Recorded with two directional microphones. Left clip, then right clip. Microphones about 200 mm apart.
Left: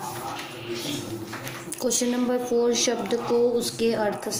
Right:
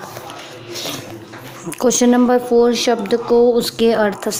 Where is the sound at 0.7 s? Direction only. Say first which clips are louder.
Right 6 dB; 50° right (ahead or behind).